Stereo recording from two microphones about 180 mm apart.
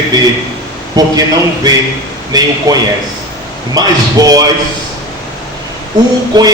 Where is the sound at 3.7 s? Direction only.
20° right (ahead or behind).